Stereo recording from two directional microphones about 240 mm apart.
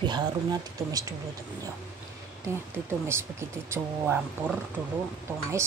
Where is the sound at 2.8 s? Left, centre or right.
Centre.